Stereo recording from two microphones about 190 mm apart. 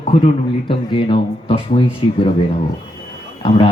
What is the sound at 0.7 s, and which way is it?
Speech, 25° left (ahead or behind).